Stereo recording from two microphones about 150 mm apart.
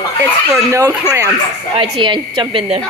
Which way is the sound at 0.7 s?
20° right (ahead or behind).